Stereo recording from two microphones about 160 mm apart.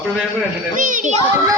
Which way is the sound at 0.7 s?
55° right (ahead or behind).